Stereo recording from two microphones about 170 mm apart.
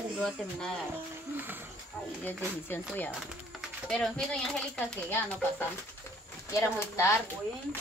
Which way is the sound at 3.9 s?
5° left (ahead or behind).